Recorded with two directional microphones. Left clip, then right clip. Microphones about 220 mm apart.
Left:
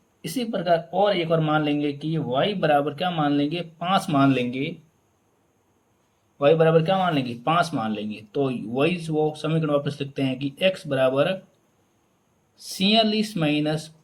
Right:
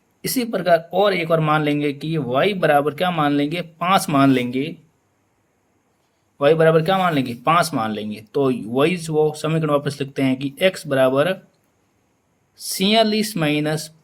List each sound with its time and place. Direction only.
0.2 s a man's voice: 40° right (ahead or behind)
6.4 s a man's voice: 35° right (ahead or behind)
12.5 s a man's voice: 35° right (ahead or behind)